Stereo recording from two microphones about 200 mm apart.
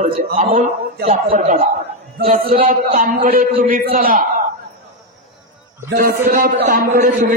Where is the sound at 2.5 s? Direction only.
45° right (ahead or behind).